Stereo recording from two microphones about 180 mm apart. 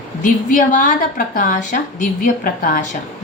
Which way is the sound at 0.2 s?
45° left (ahead or behind).